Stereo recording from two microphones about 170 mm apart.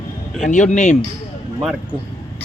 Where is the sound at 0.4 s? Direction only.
45° left (ahead or behind).